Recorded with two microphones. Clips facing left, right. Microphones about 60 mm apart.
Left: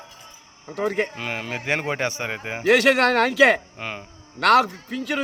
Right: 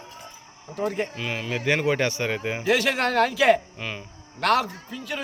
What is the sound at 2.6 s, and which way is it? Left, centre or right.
Speech, left.